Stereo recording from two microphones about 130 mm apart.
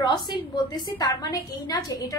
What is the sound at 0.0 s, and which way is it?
A woman's voice, 35° left (ahead or behind).